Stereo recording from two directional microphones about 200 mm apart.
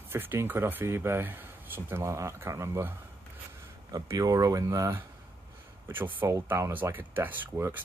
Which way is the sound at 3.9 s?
15° right (ahead or behind).